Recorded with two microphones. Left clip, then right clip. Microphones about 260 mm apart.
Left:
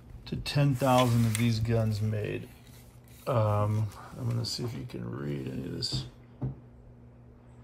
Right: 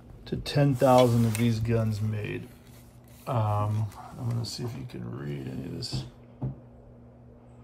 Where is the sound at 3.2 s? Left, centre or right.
Left.